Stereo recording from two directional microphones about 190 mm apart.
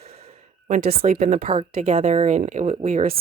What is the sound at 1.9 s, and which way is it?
Speech, 30° right (ahead or behind).